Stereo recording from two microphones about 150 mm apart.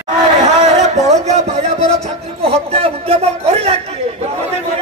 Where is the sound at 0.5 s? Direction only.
50° right (ahead or behind).